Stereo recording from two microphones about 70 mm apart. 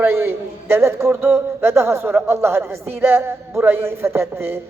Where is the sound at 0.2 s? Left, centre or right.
Right.